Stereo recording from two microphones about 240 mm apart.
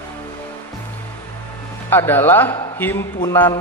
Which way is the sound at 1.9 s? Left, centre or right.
Centre.